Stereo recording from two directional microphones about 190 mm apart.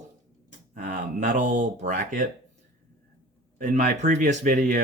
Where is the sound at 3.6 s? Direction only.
40° right (ahead or behind).